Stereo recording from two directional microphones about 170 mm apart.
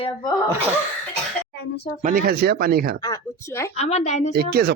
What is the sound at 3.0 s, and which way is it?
Speech, 20° left (ahead or behind).